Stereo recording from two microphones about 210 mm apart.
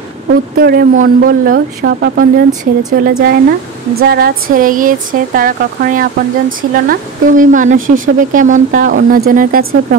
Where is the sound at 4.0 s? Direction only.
45° right (ahead or behind).